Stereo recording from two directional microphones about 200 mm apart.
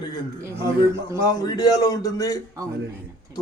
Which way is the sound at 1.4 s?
20° left (ahead or behind).